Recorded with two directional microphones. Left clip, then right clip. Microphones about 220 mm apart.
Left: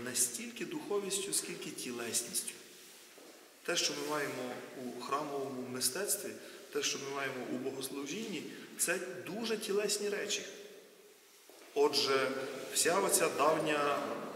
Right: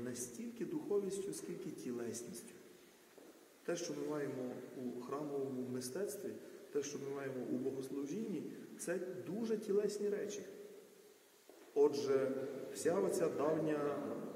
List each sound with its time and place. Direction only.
0.1 s a man's voice: 5° right (ahead or behind)
0.7 s a man's voice: 15° right (ahead or behind)
1.0 s a man's voice: 5° right (ahead or behind)
3.6 s a man's voice: 5° right (ahead or behind)
5.3 s a man's voice: 20° right (ahead or behind)
5.8 s a man's voice: 5° right (ahead or behind)
7.8 s a man's voice: 5° right (ahead or behind)
9.0 s a man's voice: 15° right (ahead or behind)
9.4 s a man's voice: 5° right (ahead or behind)
11.9 s a man's voice: 5° right (ahead or behind)